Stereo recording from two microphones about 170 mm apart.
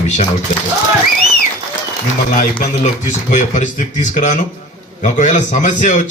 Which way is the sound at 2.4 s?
50° left (ahead or behind).